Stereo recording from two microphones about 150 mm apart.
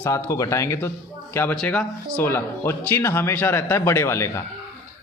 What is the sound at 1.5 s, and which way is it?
Speech, 5° left (ahead or behind).